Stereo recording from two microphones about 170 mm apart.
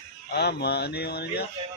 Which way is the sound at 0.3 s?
70° left (ahead or behind).